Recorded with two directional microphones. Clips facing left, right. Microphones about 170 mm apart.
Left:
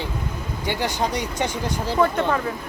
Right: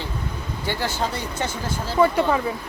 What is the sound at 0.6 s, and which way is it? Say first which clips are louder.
Speech: left 2 dB; 15° left (ahead or behind).